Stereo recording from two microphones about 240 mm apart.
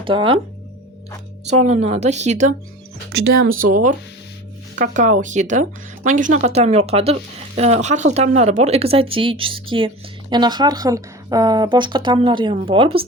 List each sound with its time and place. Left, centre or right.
0.0 s speech: right
1.5 s speech: right
3.1 s speech: right